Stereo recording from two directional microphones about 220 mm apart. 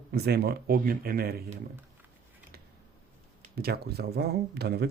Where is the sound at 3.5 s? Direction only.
45° right (ahead or behind).